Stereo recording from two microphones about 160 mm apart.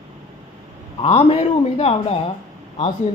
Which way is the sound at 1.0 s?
35° left (ahead or behind).